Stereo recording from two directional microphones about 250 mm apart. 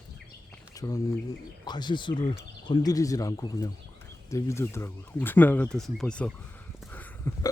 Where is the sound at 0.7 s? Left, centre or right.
Centre.